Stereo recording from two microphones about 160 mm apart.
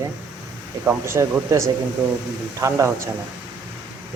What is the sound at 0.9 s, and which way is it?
A man's voice, 15° right (ahead or behind).